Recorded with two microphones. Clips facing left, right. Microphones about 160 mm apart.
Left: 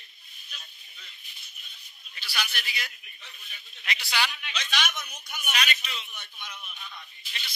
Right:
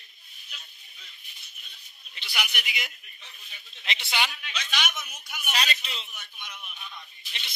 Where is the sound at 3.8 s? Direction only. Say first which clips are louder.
Even; 25° right (ahead or behind).